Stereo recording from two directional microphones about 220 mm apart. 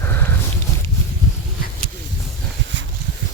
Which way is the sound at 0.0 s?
10° left (ahead or behind).